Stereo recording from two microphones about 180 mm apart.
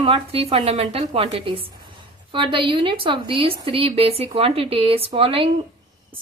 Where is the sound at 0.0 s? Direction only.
30° right (ahead or behind).